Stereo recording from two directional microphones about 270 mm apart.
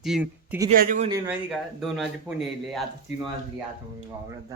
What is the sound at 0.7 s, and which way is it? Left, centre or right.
Speech, right.